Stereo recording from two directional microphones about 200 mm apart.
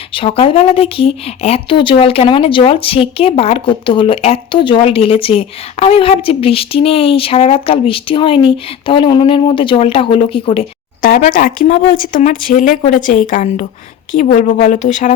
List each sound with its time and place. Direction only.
0.1 s speech: 30° left (ahead or behind)
11.0 s speech: 45° left (ahead or behind)